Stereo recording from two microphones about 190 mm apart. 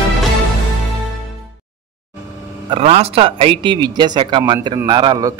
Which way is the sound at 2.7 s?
30° right (ahead or behind).